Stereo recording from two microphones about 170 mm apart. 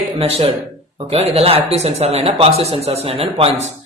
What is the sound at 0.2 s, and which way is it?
Speech, 35° right (ahead or behind).